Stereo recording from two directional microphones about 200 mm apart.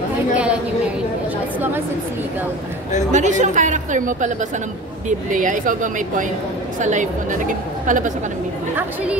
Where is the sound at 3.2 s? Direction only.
35° right (ahead or behind).